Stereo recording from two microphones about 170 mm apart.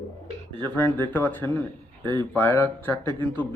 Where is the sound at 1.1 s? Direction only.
10° left (ahead or behind).